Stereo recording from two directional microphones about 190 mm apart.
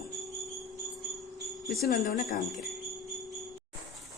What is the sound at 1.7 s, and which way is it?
Speech, 55° left (ahead or behind).